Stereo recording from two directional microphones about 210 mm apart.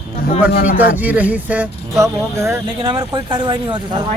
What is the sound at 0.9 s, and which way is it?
Speech, 5° right (ahead or behind).